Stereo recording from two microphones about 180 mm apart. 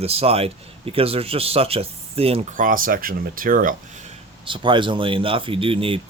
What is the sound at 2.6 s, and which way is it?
Speech, 50° right (ahead or behind).